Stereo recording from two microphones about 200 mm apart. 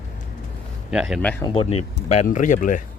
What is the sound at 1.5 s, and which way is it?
Speech, 30° left (ahead or behind).